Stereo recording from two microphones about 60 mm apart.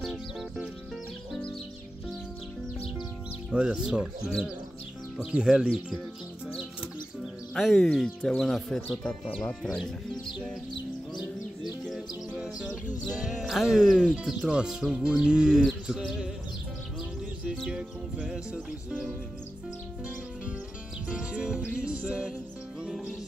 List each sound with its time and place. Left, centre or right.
0.1 s music: centre
3.5 s speech: centre
5.3 s speech: centre
7.5 s speech: centre
12.4 s music: centre
13.2 s speech: centre
18.2 s speech: centre
21.1 s music: centre